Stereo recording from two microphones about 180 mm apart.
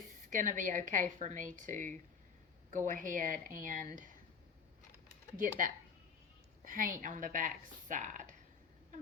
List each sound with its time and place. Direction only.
0.2 s a woman's voice: 45° right (ahead or behind)
5.4 s a woman's voice: 45° right (ahead or behind)